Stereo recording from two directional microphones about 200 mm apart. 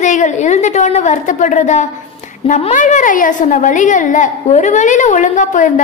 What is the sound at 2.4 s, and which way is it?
A woman's voice, 35° left (ahead or behind).